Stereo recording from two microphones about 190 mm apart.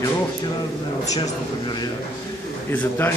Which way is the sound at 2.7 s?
10° left (ahead or behind).